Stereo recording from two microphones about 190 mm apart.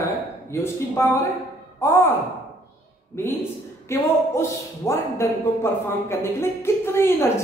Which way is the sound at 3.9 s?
15° left (ahead or behind).